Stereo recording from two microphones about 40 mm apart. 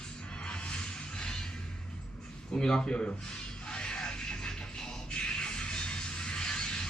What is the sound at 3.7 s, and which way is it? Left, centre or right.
Music, left.